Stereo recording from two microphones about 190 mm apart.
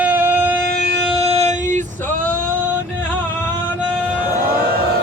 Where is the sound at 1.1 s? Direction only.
35° right (ahead or behind).